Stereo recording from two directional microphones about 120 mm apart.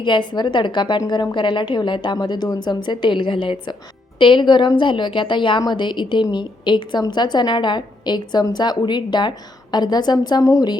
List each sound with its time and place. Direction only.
0.0 s a woman's voice: 40° left (ahead or behind)